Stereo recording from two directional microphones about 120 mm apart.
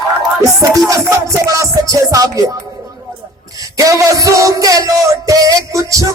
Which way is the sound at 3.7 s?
25° right (ahead or behind).